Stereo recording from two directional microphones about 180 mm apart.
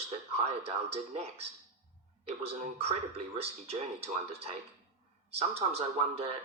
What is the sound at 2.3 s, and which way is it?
Speech, 35° right (ahead or behind).